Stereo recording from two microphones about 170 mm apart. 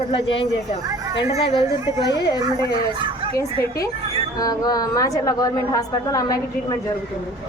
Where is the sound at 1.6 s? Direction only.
20° right (ahead or behind).